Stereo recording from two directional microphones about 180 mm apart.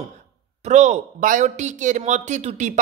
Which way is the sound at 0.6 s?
40° right (ahead or behind).